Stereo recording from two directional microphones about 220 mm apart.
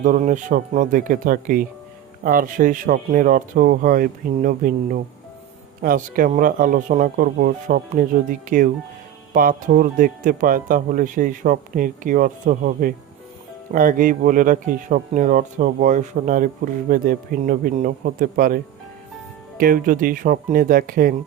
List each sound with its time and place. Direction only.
0.0 s speech: 35° right (ahead or behind)